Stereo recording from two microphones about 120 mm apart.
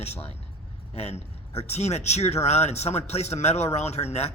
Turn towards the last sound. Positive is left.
turn(degrees=60)  # may be behind; listen again after turning